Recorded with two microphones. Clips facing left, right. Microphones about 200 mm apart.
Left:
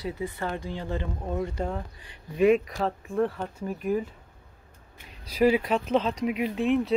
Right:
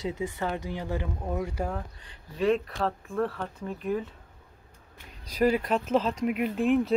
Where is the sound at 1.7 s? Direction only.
10° left (ahead or behind).